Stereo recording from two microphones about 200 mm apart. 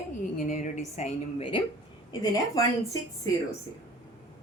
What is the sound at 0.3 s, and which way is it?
A woman's voice, 40° left (ahead or behind).